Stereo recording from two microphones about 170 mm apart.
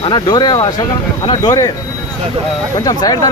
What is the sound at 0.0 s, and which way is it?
Speech, 25° left (ahead or behind).